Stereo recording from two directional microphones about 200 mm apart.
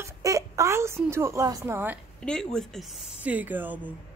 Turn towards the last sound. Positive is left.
turn(degrees=-10)  # may be behind; listen again after turning